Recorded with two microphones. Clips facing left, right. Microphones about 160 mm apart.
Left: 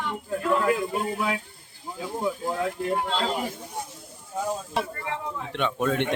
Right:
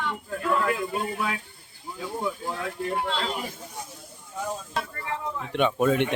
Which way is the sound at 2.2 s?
20° left (ahead or behind).